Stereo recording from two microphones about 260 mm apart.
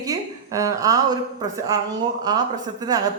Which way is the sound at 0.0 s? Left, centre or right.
Centre.